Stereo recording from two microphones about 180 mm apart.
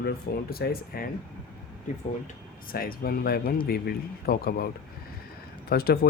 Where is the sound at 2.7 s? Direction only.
55° left (ahead or behind).